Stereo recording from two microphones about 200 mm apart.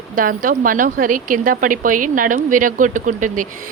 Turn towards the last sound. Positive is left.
turn(degrees=-40)  # may be behind; listen again after turning